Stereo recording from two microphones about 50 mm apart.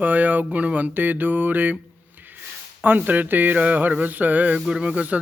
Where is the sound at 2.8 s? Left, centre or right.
Right.